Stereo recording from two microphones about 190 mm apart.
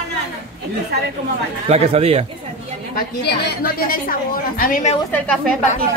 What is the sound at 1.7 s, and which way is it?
Speech, 35° right (ahead or behind).